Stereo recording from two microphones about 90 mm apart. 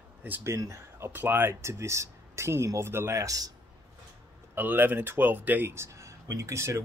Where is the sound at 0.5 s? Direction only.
35° right (ahead or behind).